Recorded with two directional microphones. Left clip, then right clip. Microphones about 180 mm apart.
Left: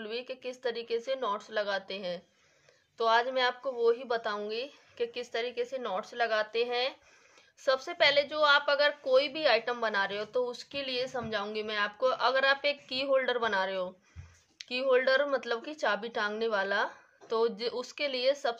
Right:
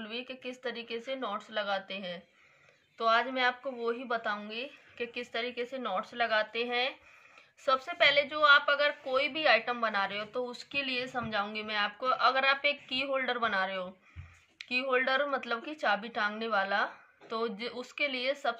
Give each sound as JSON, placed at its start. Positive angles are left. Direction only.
{"t": 0.0, "sound": "a woman's voice", "side_deg": 50}